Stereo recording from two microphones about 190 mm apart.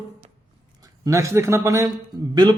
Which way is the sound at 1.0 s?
15° right (ahead or behind).